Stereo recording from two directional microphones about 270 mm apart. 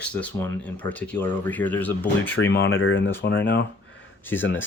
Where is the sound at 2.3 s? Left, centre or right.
Left.